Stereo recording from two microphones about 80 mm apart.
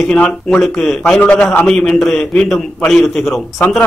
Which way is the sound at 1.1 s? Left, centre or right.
Centre.